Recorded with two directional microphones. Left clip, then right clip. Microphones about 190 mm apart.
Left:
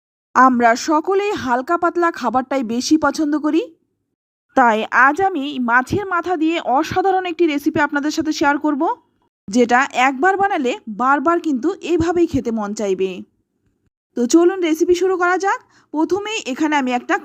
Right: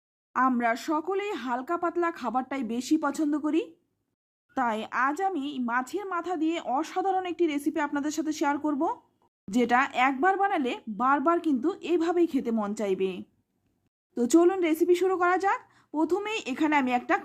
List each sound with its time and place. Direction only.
0.6 s speech: 35° left (ahead or behind)